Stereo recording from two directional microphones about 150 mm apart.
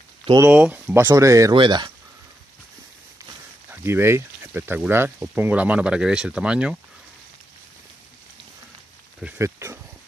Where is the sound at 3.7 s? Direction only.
15° right (ahead or behind).